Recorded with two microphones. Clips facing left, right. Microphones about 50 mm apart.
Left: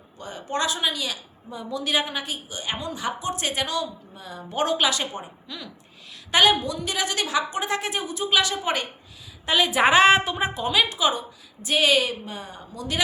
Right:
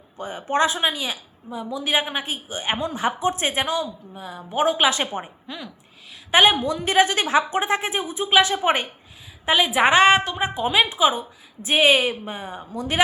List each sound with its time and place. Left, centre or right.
0.2 s a woman's voice: right
1.5 s a woman's voice: centre
1.8 s a woman's voice: centre
4.9 s a woman's voice: right
6.6 s a woman's voice: right
9.5 s a woman's voice: centre
11.6 s a woman's voice: right